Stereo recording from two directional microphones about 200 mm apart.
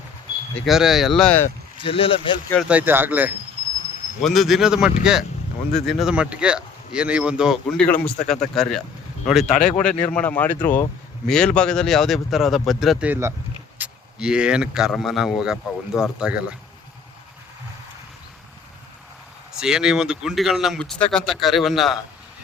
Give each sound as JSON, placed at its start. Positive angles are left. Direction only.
{"t": 0.6, "sound": "speech", "side_deg": 0}
{"t": 1.8, "sound": "speech", "side_deg": 25}
{"t": 2.6, "sound": "speech", "side_deg": -10}
{"t": 19.5, "sound": "speech", "side_deg": -5}